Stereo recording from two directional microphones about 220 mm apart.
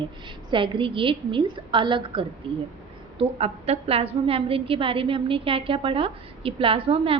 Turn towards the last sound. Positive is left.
turn(degrees=-25)  # may be behind; listen again after turning